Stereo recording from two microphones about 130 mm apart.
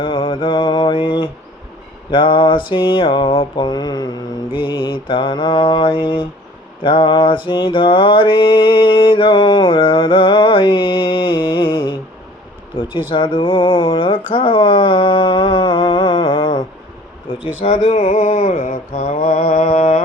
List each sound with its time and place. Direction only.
0.0 s mantra: 40° left (ahead or behind)
13.1 s mantra: 40° left (ahead or behind)
17.3 s speech: 45° left (ahead or behind)
17.7 s mantra: 55° left (ahead or behind); by 19.5 s 85° left
19.7 s a sound: 70° left (ahead or behind)